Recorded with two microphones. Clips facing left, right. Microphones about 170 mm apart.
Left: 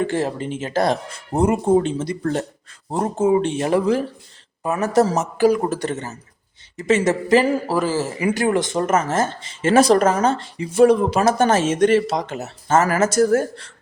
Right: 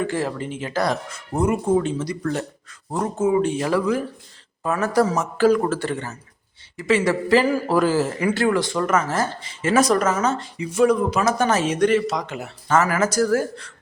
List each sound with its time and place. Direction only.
0.1 s speech: 25° left (ahead or behind)
7.7 s speech: centre (ahead or behind); by 12.1 s 30° left (ahead or behind)
12.3 s speech: 45° left (ahead or behind)
13.0 s speech: 25° left (ahead or behind)